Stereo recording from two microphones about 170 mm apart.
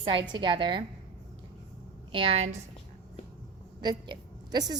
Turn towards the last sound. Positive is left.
turn(degrees=-25)  # may be behind; listen again after turning